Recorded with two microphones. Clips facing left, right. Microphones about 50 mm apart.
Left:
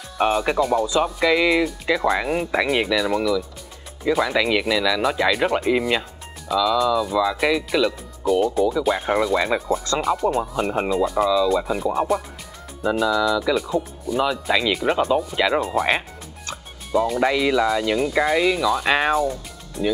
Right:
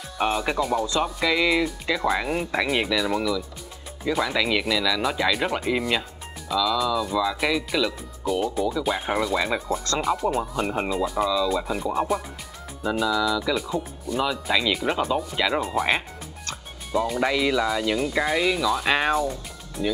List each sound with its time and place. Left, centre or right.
0.2 s speech: centre